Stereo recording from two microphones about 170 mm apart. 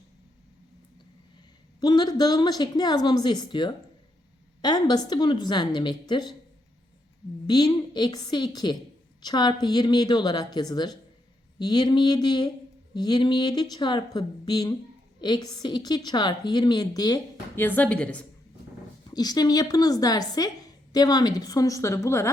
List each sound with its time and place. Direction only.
1.8 s a woman's voice: 25° left (ahead or behind)
7.4 s a woman's voice: 25° left (ahead or behind)
17.6 s a woman's voice: 10° left (ahead or behind)
19.0 s a woman's voice: 25° left (ahead or behind)